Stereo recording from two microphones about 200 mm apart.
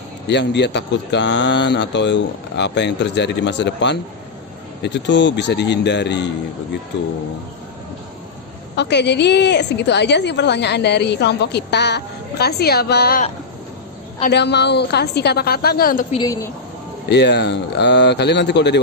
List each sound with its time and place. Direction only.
0.3 s a woman's voice: 60° left (ahead or behind)
8.7 s a woman's voice: 60° left (ahead or behind)
14.3 s a woman's voice: 55° left (ahead or behind)
16.1 s a woman's voice: 20° left (ahead or behind)
17.1 s a woman's voice: 60° left (ahead or behind)